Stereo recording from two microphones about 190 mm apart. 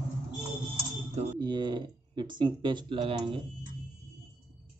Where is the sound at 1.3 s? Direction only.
25° right (ahead or behind).